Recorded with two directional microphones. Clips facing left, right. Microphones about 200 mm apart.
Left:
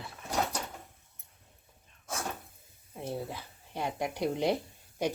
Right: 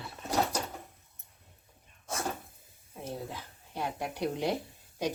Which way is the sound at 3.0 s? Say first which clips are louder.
Left 2 dB; 10° left (ahead or behind).